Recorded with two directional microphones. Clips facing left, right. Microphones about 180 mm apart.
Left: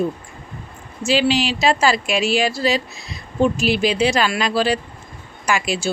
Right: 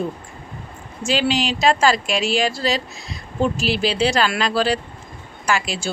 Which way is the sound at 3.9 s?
10° left (ahead or behind).